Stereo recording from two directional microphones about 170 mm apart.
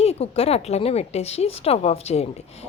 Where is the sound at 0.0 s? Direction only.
35° left (ahead or behind).